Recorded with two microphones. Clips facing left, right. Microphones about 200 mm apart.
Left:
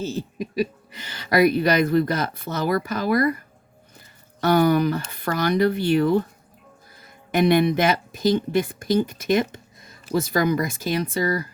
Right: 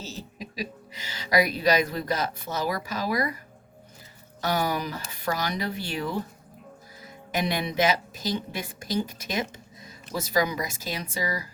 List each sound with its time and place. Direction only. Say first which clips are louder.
0.0 s speech: left 10 dB; 55° left (ahead or behind)
4.4 s speech: left 9 dB; 60° left (ahead or behind)